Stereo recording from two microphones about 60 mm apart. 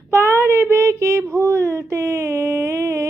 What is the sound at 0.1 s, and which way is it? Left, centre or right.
Child singing, right.